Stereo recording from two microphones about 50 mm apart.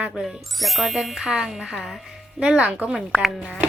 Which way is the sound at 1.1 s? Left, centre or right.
Centre.